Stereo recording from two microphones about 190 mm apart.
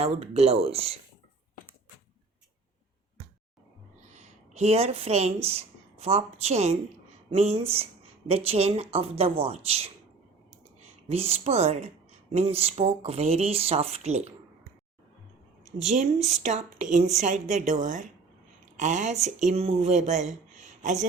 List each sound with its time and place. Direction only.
0.0 s speech: 35° right (ahead or behind)
4.1 s speech: 35° right (ahead or behind)
11.1 s speech: 35° right (ahead or behind)
16.3 s speech: 40° right (ahead or behind)